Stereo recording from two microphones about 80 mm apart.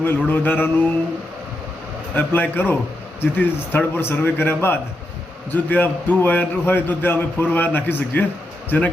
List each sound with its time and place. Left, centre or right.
0.3 s a man's voice: left
2.1 s a man's voice: left